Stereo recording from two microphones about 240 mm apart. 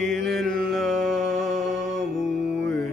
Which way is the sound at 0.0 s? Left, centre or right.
Centre.